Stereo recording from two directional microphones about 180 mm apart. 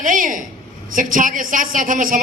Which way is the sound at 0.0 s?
45° right (ahead or behind).